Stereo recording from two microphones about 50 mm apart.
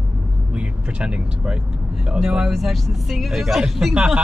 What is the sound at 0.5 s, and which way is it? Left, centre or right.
Speech, right.